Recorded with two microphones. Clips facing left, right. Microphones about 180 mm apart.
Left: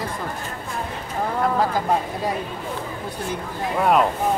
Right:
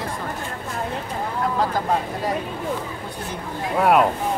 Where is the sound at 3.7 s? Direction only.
5° right (ahead or behind).